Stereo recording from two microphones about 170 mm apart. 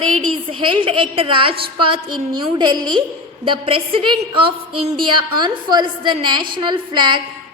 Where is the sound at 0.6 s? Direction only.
30° right (ahead or behind).